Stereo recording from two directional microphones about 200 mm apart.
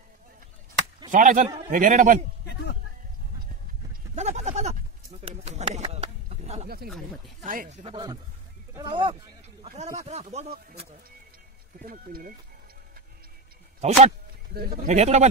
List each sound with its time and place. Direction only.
1.1 s a man's voice: 40° right (ahead or behind)
2.4 s a sound: 55° left (ahead or behind)
3.9 s a sound: 35° right (ahead or behind)
7.4 s a man's voice: 40° right (ahead or behind)
7.9 s speech: 20° right (ahead or behind)
9.6 s a sound: 35° right (ahead or behind)
10.0 s a man's voice: 35° right (ahead or behind)
11.8 s speech: 45° right (ahead or behind)
13.7 s speech: 35° right (ahead or behind)
14.5 s speech: 50° right (ahead or behind)
14.9 s a man's voice: 35° right (ahead or behind)